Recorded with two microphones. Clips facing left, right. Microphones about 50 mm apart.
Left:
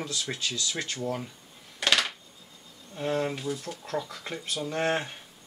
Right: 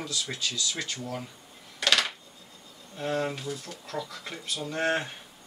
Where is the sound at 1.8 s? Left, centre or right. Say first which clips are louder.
Even; centre.